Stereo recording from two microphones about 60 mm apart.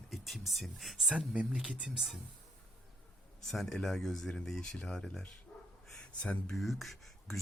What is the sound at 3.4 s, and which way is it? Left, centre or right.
Speech, centre.